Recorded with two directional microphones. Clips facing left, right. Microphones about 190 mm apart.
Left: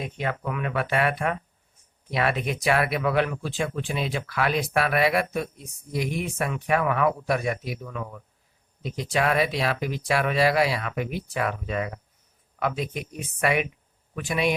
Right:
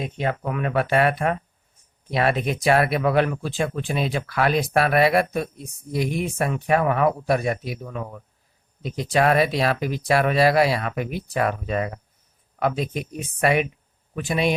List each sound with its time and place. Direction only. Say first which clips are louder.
0.0 s speech: right 4 dB; 30° right (ahead or behind)
0.4 s speech: right 4 dB; 40° right (ahead or behind)